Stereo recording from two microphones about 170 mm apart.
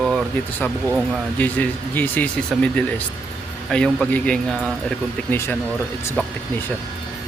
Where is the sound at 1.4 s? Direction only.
10° left (ahead or behind).